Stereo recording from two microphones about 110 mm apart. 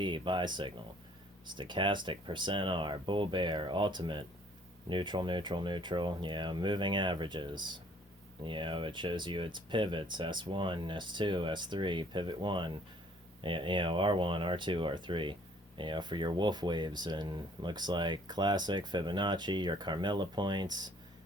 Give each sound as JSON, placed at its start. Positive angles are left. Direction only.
{"t": 0.0, "sound": "speech", "side_deg": -45}